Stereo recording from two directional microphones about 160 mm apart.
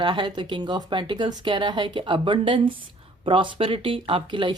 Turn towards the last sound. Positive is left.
turn(degrees=-30)  # may be behind; listen again after turning